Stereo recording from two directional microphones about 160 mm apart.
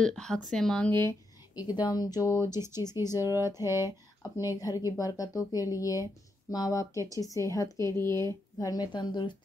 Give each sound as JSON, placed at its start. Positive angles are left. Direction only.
{"t": 0.0, "sound": "speech", "side_deg": 5}
{"t": 1.7, "sound": "speech", "side_deg": 25}